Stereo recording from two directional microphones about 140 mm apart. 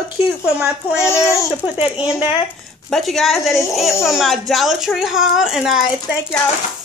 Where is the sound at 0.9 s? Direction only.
20° left (ahead or behind).